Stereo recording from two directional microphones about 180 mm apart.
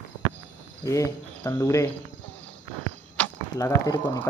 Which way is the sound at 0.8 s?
20° left (ahead or behind).